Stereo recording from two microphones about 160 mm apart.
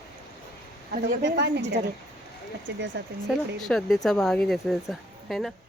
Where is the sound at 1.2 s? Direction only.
90° right.